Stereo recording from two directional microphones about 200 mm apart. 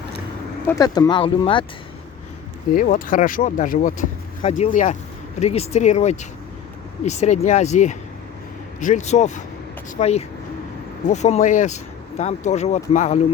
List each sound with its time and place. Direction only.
0.7 s speech: 20° left (ahead or behind)
2.7 s speech: 40° left (ahead or behind)